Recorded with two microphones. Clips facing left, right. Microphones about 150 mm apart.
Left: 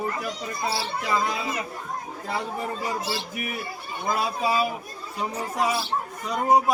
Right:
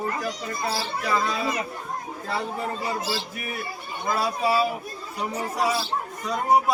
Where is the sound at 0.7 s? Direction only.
20° left (ahead or behind).